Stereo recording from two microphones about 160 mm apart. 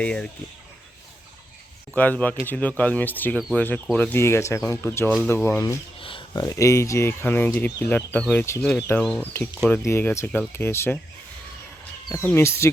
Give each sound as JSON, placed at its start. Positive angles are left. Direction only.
{"t": 0.0, "sound": "speech", "side_deg": 5}
{"t": 2.0, "sound": "speech", "side_deg": 10}
{"t": 6.0, "sound": "speech", "side_deg": 35}
{"t": 12.0, "sound": "speech", "side_deg": 15}